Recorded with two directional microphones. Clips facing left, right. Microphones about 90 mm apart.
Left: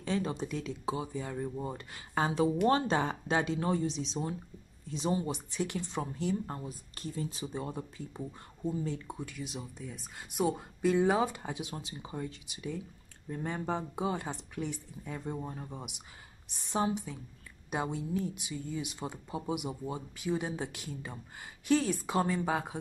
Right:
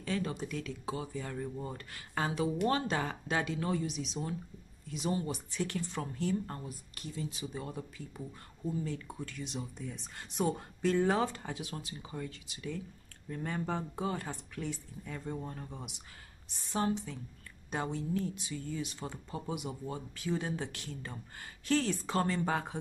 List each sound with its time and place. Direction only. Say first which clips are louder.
0.0 s speech: left 2 dB; 25° left (ahead or behind)
7.0 s speech: left 3 dB; 35° left (ahead or behind); by 9.3 s 20° left (ahead or behind)
9.3 s speech: even; 5° left (ahead or behind)